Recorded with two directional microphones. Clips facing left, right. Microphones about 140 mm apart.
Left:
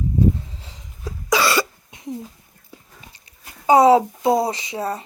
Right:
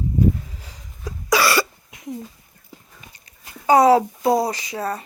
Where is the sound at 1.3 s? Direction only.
20° left (ahead or behind).